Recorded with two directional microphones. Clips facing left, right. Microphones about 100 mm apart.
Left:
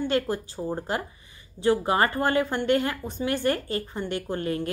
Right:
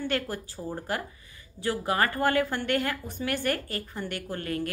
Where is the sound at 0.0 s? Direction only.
20° left (ahead or behind).